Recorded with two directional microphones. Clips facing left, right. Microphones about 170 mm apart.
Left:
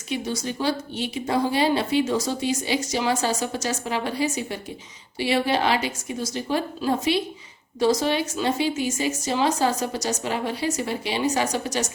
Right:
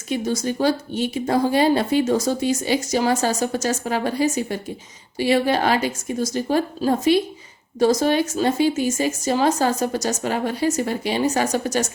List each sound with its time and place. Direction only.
0.1 s speech: 45° right (ahead or behind)